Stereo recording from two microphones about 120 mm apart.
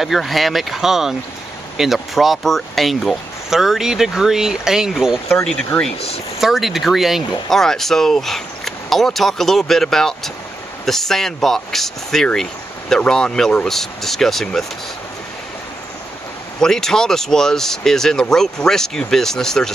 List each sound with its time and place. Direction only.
0.0 s speech: centre (ahead or behind)
5.9 s speech: 55° left (ahead or behind)
6.4 s speech: centre (ahead or behind)
16.5 s speech: 5° left (ahead or behind)